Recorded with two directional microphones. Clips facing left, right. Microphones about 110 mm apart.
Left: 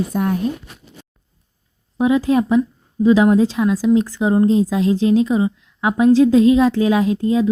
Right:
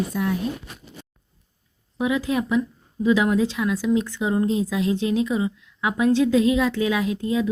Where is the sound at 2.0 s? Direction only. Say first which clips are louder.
Left 7 dB; 35° left (ahead or behind).